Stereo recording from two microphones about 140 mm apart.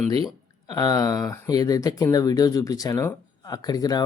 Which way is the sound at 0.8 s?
25° left (ahead or behind).